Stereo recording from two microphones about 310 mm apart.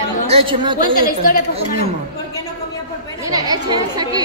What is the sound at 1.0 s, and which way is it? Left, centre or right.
Speech, left.